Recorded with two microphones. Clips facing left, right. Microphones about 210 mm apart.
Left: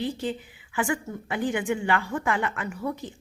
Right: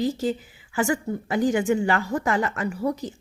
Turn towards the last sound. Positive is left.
turn(degrees=-40)  # may be behind; listen again after turning